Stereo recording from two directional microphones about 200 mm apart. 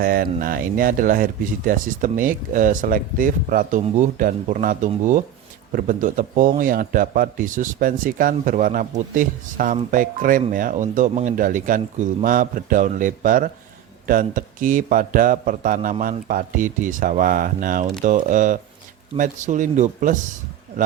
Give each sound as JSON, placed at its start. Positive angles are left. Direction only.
{"t": 0.0, "sound": "speech", "side_deg": -45}